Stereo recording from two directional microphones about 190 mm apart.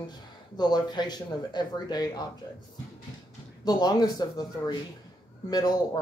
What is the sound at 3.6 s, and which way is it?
Speech, 20° left (ahead or behind).